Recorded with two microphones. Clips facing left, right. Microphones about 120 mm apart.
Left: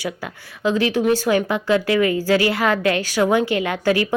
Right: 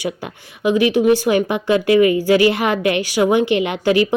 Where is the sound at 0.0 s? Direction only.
15° right (ahead or behind).